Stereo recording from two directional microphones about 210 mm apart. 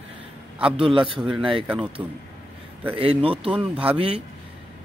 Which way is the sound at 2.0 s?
5° right (ahead or behind).